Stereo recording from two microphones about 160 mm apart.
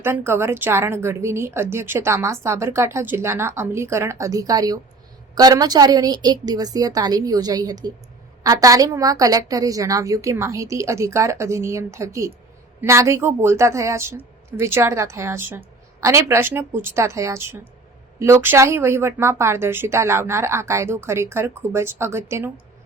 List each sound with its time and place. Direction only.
0.0 s a woman's voice: 15° right (ahead or behind)